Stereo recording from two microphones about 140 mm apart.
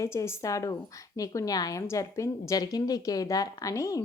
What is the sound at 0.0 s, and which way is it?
A woman's voice, 20° left (ahead or behind).